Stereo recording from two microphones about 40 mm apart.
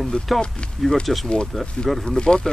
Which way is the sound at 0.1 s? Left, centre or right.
Left.